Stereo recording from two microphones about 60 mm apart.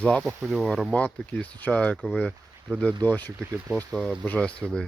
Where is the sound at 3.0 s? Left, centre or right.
Left.